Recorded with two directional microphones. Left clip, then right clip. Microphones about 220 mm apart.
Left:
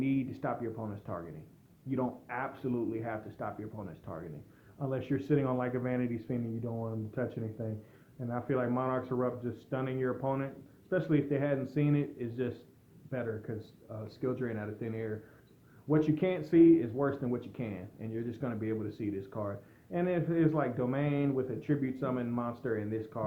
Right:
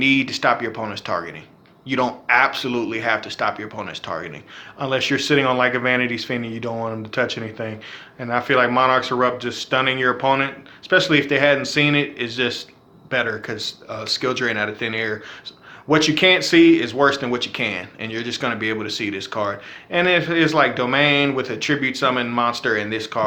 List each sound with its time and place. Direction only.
0.0 s speech: 10° right (ahead or behind)
6.7 s speech: 30° right (ahead or behind)
7.2 s speech: 15° right (ahead or behind)